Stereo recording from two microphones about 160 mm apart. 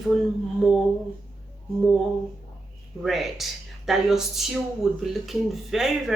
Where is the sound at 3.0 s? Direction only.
Centre (ahead or behind).